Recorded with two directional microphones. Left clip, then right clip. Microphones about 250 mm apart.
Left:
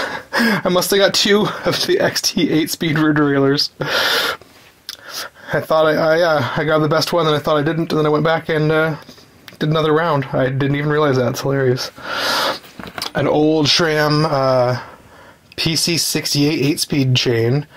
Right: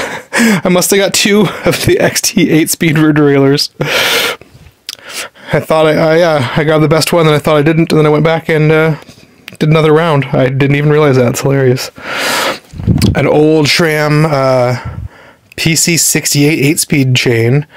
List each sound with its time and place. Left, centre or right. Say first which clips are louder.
0.0 s speech: right 5 dB; right
2.3 s speech: right 7 dB; right
2.9 s speech: right 7 dB; right
15.5 s speech: right 6 dB; right
16.3 s speech: right 6 dB; right